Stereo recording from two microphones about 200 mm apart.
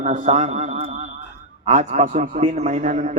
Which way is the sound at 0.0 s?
40° right (ahead or behind).